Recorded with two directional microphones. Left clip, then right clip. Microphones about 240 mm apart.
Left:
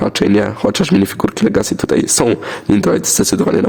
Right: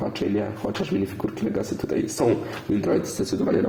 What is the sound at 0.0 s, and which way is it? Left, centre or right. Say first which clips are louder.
Speech: left 12 dB; left.